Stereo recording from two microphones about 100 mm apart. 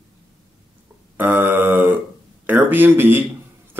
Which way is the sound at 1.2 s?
20° right (ahead or behind).